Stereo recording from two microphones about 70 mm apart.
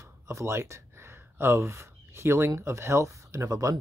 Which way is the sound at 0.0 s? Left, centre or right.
Right.